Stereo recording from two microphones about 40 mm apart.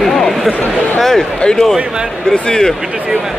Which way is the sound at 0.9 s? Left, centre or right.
Centre.